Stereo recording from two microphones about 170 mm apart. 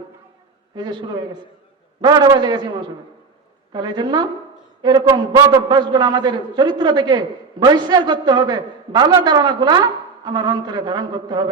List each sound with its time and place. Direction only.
0.8 s a man's voice: 25° right (ahead or behind)
3.7 s a man's voice: 25° right (ahead or behind)